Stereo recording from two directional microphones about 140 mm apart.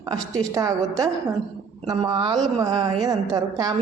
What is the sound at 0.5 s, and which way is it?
Speech, 25° right (ahead or behind).